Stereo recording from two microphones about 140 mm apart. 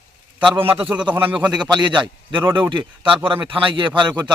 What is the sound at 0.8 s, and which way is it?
Speech, 10° right (ahead or behind).